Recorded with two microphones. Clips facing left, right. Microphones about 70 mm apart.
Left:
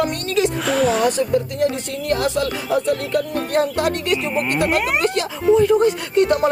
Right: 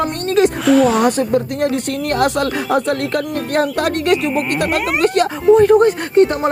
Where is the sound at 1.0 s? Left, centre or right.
Right.